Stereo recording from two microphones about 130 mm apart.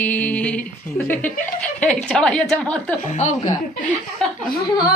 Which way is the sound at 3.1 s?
65° left (ahead or behind).